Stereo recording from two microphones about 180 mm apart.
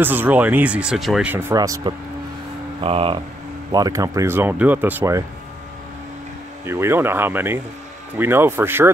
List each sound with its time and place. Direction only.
0.0 s speech: 10° right (ahead or behind)
2.8 s speech: 30° right (ahead or behind)
3.7 s speech: 20° right (ahead or behind)
6.6 s speech: 15° right (ahead or behind)